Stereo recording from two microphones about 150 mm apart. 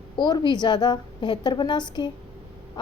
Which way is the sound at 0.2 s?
30° left (ahead or behind).